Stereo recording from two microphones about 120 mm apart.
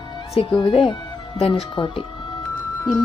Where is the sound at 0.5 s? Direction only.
45° left (ahead or behind).